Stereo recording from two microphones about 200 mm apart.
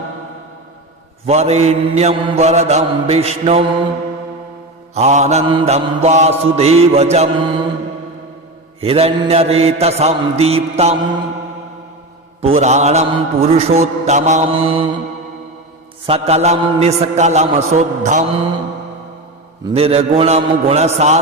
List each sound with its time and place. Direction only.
1.2 s mantra: 30° right (ahead or behind)
4.9 s mantra: 35° right (ahead or behind)
8.8 s mantra: 30° right (ahead or behind)
12.4 s mantra: 30° right (ahead or behind)
16.0 s mantra: 30° right (ahead or behind)
19.6 s mantra: 30° right (ahead or behind)